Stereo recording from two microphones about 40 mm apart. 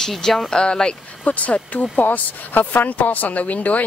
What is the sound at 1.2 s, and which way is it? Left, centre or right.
Speech, left.